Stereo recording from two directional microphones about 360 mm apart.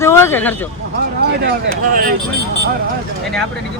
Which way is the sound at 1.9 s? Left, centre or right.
Right.